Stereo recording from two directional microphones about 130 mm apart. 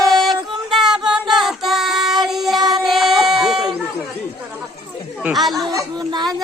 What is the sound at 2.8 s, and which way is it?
Sheep, centre (ahead or behind).